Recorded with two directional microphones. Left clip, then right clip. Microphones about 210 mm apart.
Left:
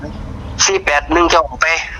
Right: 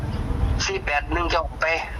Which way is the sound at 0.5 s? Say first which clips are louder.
Left 11 dB; 45° left (ahead or behind).